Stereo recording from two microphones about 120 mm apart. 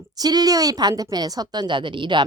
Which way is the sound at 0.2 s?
35° right (ahead or behind).